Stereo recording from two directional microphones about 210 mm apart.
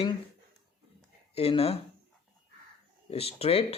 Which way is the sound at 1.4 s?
30° left (ahead or behind).